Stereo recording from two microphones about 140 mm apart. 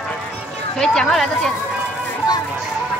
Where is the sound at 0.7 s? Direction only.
5° left (ahead or behind).